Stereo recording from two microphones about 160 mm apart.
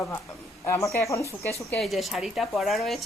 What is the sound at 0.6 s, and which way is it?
Speech, 15° left (ahead or behind).